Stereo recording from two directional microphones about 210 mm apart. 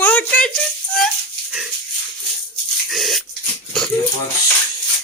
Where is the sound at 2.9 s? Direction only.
Centre (ahead or behind).